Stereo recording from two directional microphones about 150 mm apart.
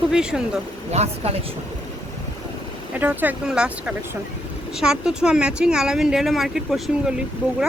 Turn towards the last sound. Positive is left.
turn(degrees=-5)  # may be behind; listen again after turning